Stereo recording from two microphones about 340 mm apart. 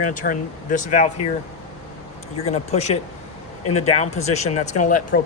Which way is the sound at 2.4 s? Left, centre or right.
Centre.